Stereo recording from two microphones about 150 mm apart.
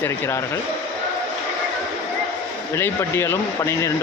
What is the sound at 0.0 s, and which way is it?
Speech, 20° left (ahead or behind).